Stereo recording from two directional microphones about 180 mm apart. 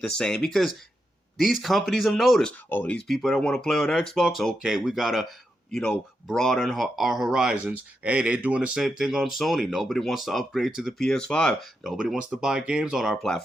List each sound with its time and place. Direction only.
0.0 s speech: 5° left (ahead or behind)